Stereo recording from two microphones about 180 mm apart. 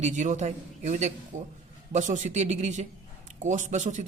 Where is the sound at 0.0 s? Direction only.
40° right (ahead or behind).